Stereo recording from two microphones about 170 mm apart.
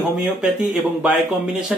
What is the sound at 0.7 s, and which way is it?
Speech, 10° right (ahead or behind).